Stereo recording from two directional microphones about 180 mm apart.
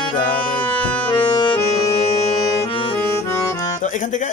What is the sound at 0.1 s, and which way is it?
Music, 30° left (ahead or behind).